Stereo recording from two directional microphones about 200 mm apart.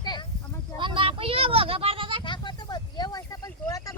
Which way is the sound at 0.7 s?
25° right (ahead or behind).